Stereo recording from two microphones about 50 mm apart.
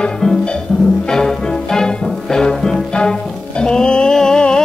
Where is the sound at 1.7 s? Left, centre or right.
Centre.